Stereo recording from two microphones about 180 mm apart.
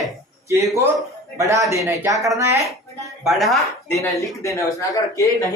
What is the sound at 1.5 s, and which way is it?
Speech, 15° right (ahead or behind).